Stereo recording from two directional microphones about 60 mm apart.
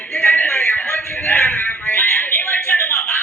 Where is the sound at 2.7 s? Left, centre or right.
Left.